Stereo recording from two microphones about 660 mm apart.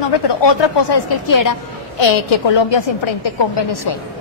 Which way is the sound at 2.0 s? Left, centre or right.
Left.